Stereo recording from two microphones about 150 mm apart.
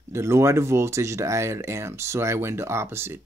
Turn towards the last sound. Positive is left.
turn(degrees=-15)  # may be behind; listen again after turning